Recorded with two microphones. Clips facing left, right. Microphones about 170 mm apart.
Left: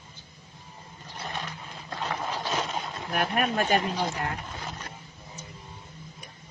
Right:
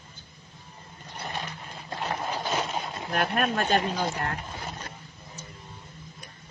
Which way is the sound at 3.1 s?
5° left (ahead or behind).